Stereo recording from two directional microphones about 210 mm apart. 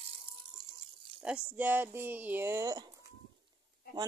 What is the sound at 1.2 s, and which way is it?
Speech, 5° right (ahead or behind).